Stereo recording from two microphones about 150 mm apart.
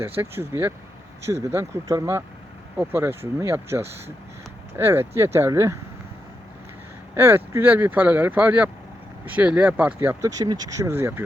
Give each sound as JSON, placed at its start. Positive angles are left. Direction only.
{"t": 0.2, "sound": "speech", "side_deg": -15}
{"t": 7.1, "sound": "speech", "side_deg": -15}